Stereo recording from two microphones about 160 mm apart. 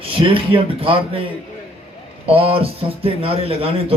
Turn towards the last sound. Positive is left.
turn(degrees=-35)  # may be behind; listen again after turning